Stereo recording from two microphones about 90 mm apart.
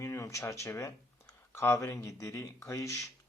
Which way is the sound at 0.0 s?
35° left (ahead or behind).